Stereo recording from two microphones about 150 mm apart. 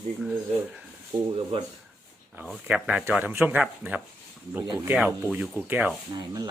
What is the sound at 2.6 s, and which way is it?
Speech, 5° right (ahead or behind).